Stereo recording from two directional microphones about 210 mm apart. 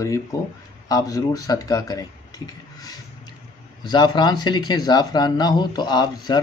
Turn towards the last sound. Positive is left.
turn(degrees=20)  # may be behind; listen again after turning